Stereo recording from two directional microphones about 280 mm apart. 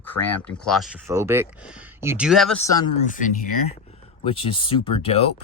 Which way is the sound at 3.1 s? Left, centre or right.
Left.